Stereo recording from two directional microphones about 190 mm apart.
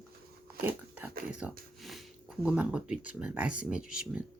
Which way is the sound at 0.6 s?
10° right (ahead or behind).